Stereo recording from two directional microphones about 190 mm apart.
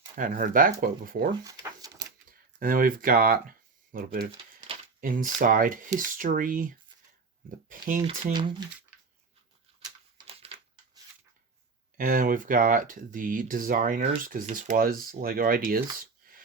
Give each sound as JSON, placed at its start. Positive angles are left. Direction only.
{"t": 0.2, "sound": "speech", "side_deg": -45}
{"t": 1.5, "sound": "a sound", "side_deg": -20}
{"t": 2.6, "sound": "speech", "side_deg": -45}
{"t": 8.0, "sound": "speech", "side_deg": -30}
{"t": 10.2, "sound": "a sound", "side_deg": -30}
{"t": 11.9, "sound": "speech", "side_deg": -45}
{"t": 16.2, "sound": "wheeze", "side_deg": -50}